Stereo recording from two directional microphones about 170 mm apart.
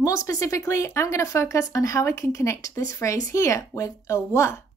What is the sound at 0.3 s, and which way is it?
A woman's voice, 20° left (ahead or behind).